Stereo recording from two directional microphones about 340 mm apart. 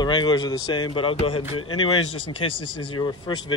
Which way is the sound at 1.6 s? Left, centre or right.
Left.